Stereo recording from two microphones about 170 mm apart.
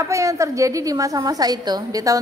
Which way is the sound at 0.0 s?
20° right (ahead or behind).